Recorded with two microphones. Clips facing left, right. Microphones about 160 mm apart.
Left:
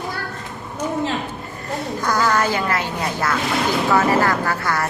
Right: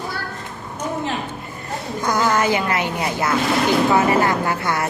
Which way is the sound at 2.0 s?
20° right (ahead or behind).